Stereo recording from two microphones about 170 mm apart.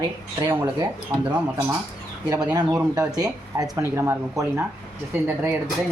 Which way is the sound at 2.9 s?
20° right (ahead or behind).